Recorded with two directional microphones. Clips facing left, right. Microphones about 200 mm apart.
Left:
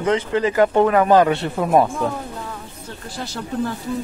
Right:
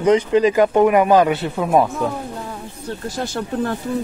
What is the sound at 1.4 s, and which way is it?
Speech, centre (ahead or behind).